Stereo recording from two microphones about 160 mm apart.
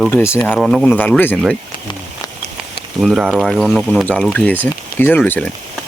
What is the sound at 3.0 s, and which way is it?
Speech, 5° right (ahead or behind).